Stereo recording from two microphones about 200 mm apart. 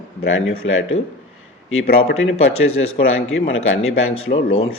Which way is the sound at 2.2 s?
85° left.